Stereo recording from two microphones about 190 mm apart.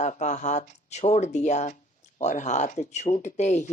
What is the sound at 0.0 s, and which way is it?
Speech, 40° left (ahead or behind).